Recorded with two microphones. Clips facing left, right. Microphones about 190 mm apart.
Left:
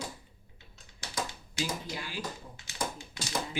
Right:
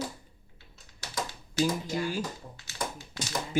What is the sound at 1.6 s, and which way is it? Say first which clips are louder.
Speech: right 8 dB; 45° right (ahead or behind).